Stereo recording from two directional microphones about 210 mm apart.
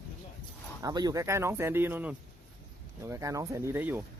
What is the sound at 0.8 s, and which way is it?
Speech, 20° right (ahead or behind).